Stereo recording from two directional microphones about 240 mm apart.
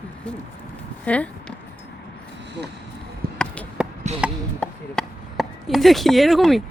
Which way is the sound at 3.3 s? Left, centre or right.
Centre.